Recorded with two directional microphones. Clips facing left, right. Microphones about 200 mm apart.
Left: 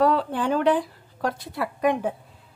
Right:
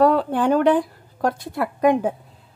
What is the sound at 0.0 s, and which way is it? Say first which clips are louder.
Speech: right 4 dB; 50° right (ahead or behind).